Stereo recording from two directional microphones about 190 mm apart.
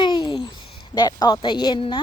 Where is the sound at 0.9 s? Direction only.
20° left (ahead or behind).